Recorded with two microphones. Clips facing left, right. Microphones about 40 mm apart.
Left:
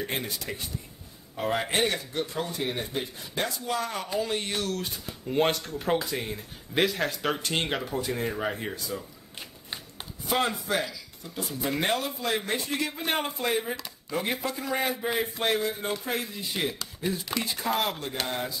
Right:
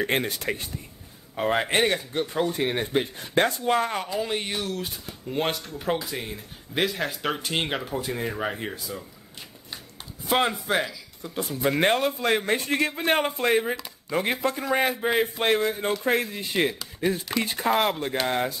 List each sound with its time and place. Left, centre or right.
0.0 s speech: right
1.3 s speech: right
2.5 s speech: right
4.2 s speech: centre
10.2 s speech: right
11.3 s speech: right
14.8 s speech: right